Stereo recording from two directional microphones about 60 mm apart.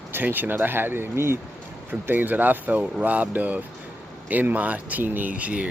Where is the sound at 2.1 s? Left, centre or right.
Right.